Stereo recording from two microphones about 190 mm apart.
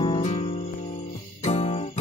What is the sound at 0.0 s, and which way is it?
Music, 30° left (ahead or behind).